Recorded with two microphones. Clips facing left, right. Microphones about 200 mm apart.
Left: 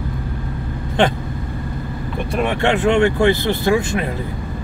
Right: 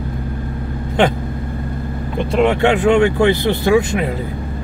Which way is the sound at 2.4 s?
15° right (ahead or behind).